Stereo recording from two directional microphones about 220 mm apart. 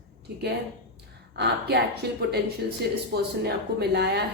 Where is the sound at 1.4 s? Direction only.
50° right (ahead or behind).